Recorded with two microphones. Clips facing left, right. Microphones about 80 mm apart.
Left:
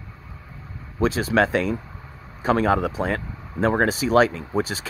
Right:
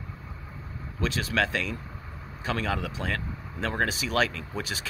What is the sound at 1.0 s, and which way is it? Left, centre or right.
Speech, left.